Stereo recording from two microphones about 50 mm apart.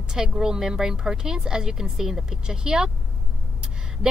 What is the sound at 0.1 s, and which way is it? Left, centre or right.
A woman's voice, centre.